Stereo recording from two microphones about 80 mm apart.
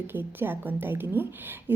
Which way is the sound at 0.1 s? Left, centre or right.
Right.